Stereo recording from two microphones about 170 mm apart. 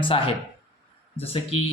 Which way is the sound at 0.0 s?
30° left (ahead or behind).